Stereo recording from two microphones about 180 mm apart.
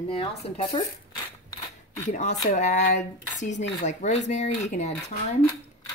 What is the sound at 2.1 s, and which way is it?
Speech, 40° left (ahead or behind).